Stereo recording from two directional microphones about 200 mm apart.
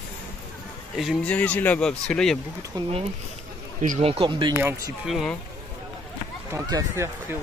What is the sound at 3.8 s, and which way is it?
Speech, 40° right (ahead or behind).